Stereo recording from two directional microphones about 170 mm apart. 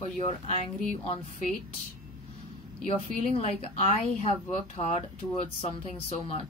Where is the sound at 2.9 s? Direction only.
35° left (ahead or behind).